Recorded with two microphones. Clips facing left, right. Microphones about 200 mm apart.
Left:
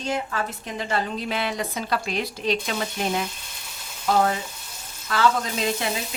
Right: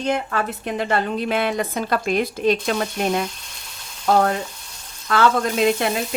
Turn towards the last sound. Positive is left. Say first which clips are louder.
# right 7 dB
turn(degrees=-60)  # may be behind; listen again after turning